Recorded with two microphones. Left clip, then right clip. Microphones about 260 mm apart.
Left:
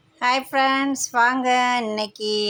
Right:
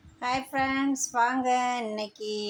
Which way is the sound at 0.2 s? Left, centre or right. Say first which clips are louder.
Left 9 dB; left.